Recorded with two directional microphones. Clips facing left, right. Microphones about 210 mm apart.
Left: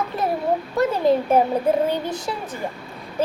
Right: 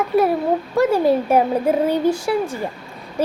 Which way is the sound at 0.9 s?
10° right (ahead or behind).